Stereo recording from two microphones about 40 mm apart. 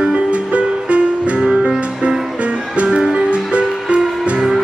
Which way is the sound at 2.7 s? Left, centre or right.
Right.